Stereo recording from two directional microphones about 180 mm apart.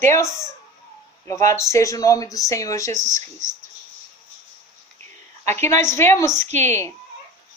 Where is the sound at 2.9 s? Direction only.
40° right (ahead or behind).